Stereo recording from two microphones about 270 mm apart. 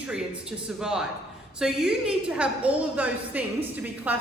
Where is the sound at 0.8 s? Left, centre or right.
Centre.